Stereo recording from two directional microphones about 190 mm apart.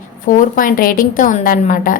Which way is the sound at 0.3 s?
45° left (ahead or behind).